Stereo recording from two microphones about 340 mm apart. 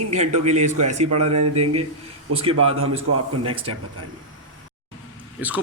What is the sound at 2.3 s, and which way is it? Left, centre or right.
Speech, right.